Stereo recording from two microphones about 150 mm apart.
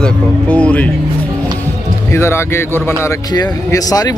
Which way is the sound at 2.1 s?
15° left (ahead or behind).